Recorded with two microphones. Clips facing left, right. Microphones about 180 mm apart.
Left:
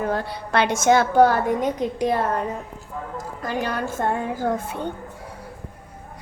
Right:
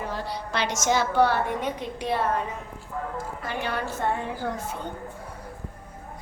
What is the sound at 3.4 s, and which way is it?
A woman's voice, 40° left (ahead or behind).